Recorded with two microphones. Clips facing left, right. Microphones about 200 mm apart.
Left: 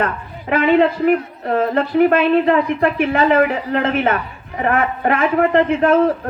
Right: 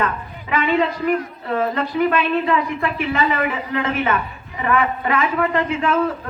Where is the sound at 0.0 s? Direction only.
50° left (ahead or behind).